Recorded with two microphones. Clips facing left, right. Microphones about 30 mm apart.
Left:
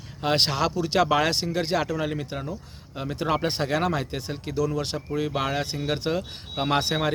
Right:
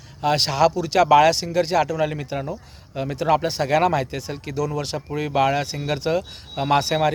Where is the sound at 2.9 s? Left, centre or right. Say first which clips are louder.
Right 6 dB; centre.